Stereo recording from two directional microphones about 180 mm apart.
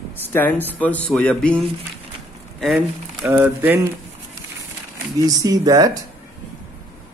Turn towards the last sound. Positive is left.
turn(degrees=-20)  # may be behind; listen again after turning